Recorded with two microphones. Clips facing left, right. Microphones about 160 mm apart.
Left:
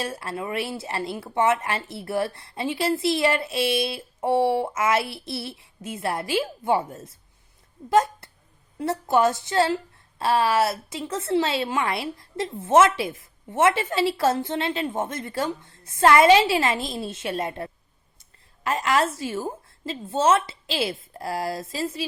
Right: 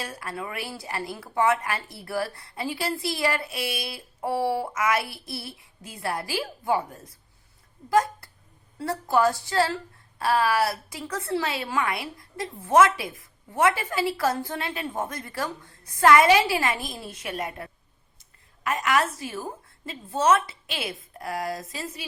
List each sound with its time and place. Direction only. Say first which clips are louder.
0.0 s a woman's voice: left 4 dB; 25° left (ahead or behind)